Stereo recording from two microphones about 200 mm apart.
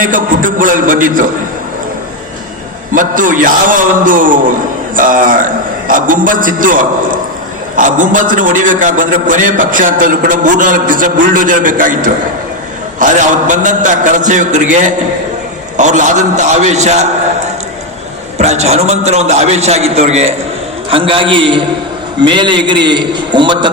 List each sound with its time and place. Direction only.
0.0 s a man's voice: 40° right (ahead or behind)
2.9 s a man's voice: 40° right (ahead or behind)
18.3 s a man's voice: 35° right (ahead or behind)